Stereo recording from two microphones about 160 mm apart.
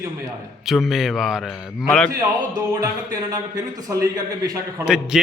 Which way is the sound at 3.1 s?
25° right (ahead or behind).